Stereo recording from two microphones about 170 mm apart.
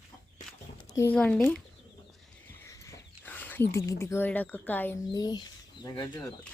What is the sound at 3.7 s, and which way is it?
Speech, 15° left (ahead or behind).